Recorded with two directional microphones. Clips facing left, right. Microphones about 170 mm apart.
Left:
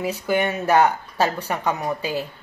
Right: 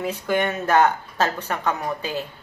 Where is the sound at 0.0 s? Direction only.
10° left (ahead or behind).